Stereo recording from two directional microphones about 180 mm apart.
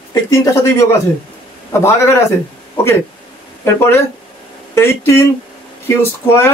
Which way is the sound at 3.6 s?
15° left (ahead or behind).